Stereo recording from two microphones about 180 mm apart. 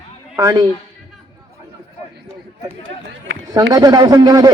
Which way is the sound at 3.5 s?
20° right (ahead or behind).